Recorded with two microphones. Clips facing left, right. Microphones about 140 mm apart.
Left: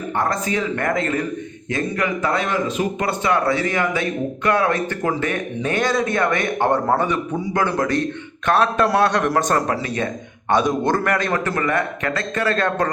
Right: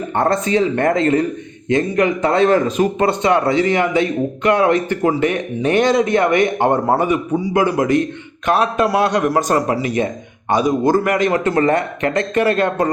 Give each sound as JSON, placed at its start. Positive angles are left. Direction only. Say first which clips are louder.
{"t": 0.2, "sound": "speech", "louder": "right 6 dB", "side_deg": -30}
{"t": 2.6, "sound": "speech", "louder": "right 5 dB", "side_deg": -45}
{"t": 3.0, "sound": "a man's voice", "louder": "right 4 dB", "side_deg": -25}